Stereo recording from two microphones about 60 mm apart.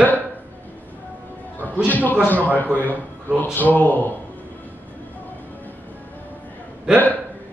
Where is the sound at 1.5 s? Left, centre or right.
Left.